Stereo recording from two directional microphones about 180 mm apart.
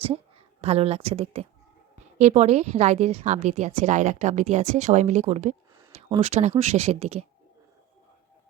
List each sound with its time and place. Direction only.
0.6 s a woman's voice: 35° right (ahead or behind)
5.7 s a sound: 15° right (ahead or behind)
6.0 s a woman's voice: 35° right (ahead or behind)